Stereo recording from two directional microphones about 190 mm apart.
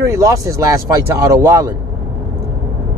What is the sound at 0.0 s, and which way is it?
Speech, 15° right (ahead or behind).